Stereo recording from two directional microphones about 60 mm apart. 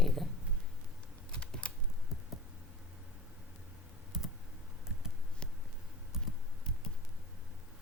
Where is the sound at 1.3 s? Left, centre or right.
Centre.